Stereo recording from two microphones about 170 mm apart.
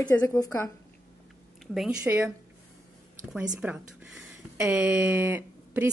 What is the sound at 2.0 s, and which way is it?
Speech, 15° right (ahead or behind).